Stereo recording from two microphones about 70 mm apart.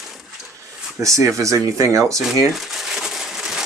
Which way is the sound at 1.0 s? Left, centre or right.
Right.